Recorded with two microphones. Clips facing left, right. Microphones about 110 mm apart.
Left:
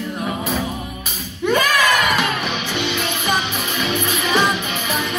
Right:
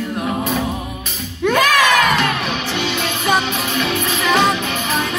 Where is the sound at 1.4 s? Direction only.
70° right (ahead or behind).